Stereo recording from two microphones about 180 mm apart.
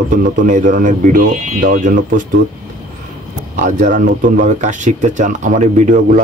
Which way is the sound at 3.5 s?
45° right (ahead or behind).